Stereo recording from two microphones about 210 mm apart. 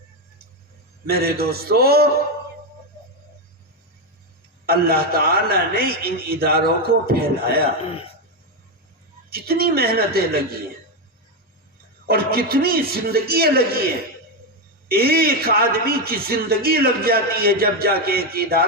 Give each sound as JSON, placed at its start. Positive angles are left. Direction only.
{"t": 1.0, "sound": "a man's voice", "side_deg": -45}
{"t": 4.6, "sound": "a man's voice", "side_deg": -45}
{"t": 9.3, "sound": "a man's voice", "side_deg": -45}
{"t": 12.0, "sound": "a man's voice", "side_deg": -45}